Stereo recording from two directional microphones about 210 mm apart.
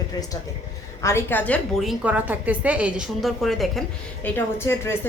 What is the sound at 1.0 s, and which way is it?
A woman's voice, 10° left (ahead or behind).